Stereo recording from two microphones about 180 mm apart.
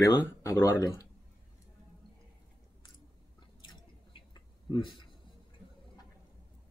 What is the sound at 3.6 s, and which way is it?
Chewing, 25° left (ahead or behind).